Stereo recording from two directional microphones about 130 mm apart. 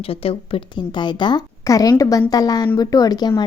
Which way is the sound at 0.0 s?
45° left (ahead or behind).